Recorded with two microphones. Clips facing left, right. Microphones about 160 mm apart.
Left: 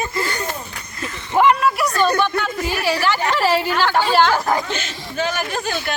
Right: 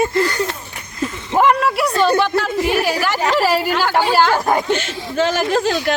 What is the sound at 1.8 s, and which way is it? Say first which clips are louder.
Speech: right 5 dB; 25° right (ahead or behind).